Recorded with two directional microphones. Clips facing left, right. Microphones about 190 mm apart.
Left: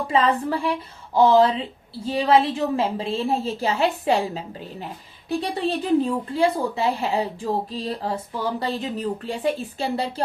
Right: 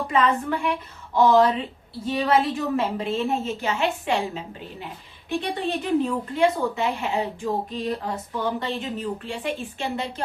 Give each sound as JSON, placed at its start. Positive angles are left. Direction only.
{"t": 0.1, "sound": "a woman's voice", "side_deg": 30}